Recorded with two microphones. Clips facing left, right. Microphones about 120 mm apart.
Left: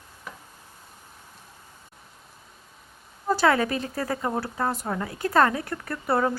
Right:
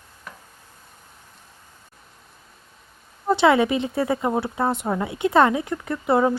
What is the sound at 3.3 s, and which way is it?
Speech, 25° right (ahead or behind).